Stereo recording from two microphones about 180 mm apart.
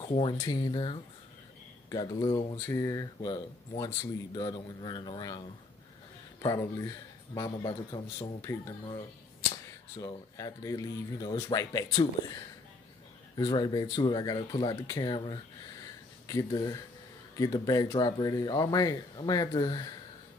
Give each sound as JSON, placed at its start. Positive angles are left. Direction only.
{"t": 0.0, "sound": "speech", "side_deg": 30}
{"t": 6.4, "sound": "speech", "side_deg": 15}
{"t": 8.5, "sound": "speech", "side_deg": 15}
{"t": 9.9, "sound": "speech", "side_deg": 20}
{"t": 13.4, "sound": "speech", "side_deg": 25}